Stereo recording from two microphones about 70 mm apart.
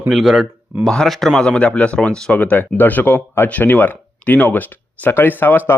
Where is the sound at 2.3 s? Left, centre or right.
Left.